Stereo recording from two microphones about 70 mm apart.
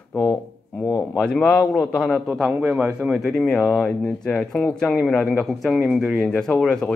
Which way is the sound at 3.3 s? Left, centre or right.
Centre.